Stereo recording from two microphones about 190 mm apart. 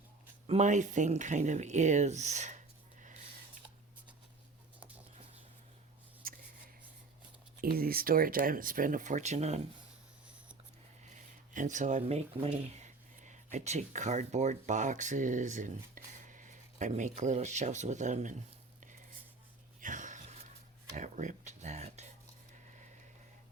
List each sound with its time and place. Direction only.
0.4 s speech: 35° right (ahead or behind)
7.6 s speech: 50° right (ahead or behind)
11.1 s speech: 40° right (ahead or behind)
19.8 s a sound: 40° right (ahead or behind)
20.9 s speech: 40° right (ahead or behind)